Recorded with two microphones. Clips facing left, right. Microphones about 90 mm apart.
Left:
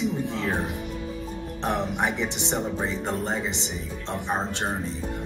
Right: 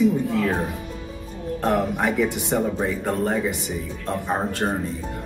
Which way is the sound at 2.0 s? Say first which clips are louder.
Right 5 dB; 20° left (ahead or behind).